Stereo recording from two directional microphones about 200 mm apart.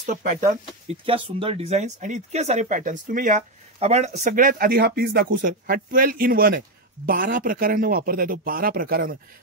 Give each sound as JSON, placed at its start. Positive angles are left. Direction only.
{"t": 0.0, "sound": "speech", "side_deg": -40}
{"t": 0.8, "sound": "speech", "side_deg": -25}